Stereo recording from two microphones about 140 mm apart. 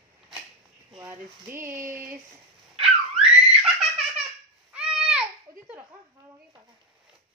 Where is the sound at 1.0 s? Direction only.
15° right (ahead or behind).